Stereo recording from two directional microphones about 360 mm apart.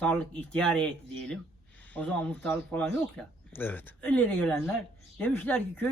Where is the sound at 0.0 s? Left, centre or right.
Centre.